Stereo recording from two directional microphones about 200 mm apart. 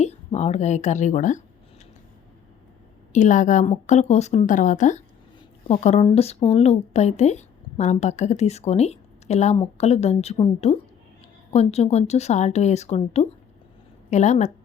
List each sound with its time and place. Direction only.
0.0 s a woman's voice: 35° left (ahead or behind)
3.1 s a woman's voice: 40° left (ahead or behind)